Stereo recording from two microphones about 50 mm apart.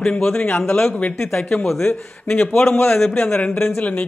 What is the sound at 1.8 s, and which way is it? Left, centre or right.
Speech, left.